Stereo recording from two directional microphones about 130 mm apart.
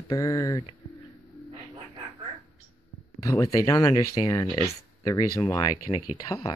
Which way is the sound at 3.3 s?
25° left (ahead or behind).